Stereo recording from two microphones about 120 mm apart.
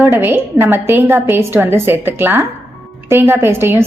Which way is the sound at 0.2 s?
15° right (ahead or behind).